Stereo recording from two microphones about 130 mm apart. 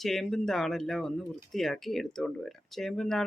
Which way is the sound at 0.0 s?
Centre (ahead or behind).